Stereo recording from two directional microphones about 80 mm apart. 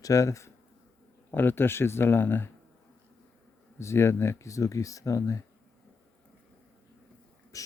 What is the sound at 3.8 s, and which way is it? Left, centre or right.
Speech, left.